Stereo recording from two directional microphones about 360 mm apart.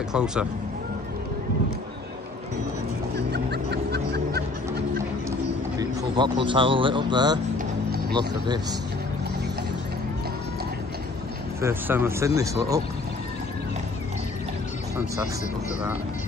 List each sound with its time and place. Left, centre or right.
0.1 s speech: centre
3.2 s music: right
5.8 s a sound: centre
6.4 s speech: centre
11.6 s speech: centre